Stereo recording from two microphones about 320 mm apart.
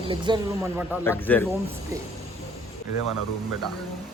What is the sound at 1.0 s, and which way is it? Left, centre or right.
Speech, centre.